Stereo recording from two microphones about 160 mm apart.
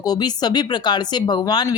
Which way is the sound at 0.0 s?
25° left (ahead or behind).